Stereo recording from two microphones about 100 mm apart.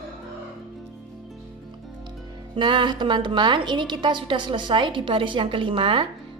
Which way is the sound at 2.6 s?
50° right (ahead or behind).